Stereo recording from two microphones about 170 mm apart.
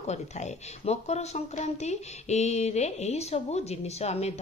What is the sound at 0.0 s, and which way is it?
Speech, 40° left (ahead or behind).